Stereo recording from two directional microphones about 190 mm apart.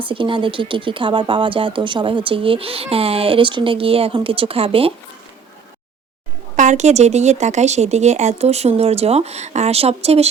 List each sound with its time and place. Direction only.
0.0 s speech: 25° right (ahead or behind)
6.6 s speech: 40° right (ahead or behind)